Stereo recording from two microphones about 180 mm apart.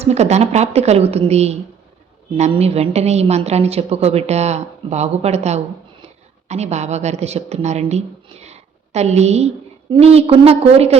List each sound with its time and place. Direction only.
0.0 s a woman's voice: 35° right (ahead or behind)